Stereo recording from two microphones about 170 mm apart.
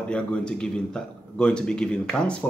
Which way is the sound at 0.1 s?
5° left (ahead or behind).